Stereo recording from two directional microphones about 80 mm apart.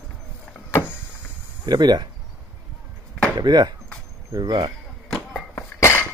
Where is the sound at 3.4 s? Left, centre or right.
Right.